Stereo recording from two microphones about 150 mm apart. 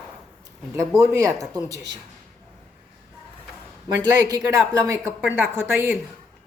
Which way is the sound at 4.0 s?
25° right (ahead or behind).